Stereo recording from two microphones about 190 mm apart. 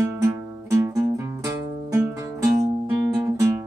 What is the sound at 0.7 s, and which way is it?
Music, 15° right (ahead or behind).